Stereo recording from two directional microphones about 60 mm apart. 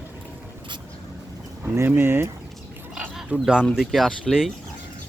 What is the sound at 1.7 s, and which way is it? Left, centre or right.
Speech, right.